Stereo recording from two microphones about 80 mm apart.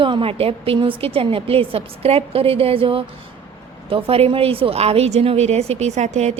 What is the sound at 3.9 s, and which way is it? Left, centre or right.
Speech, right.